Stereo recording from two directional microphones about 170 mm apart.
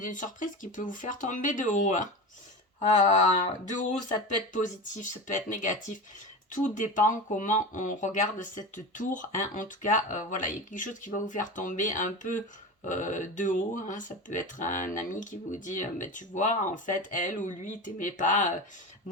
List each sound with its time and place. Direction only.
0.0 s speech: 50° left (ahead or behind)
3.4 s speech: 50° left (ahead or behind)